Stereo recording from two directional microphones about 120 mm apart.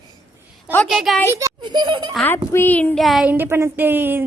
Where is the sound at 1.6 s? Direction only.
35° right (ahead or behind).